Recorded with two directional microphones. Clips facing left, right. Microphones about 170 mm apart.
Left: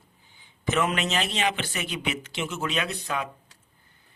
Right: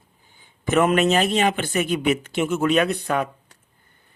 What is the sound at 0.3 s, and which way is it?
Speech, 50° right (ahead or behind).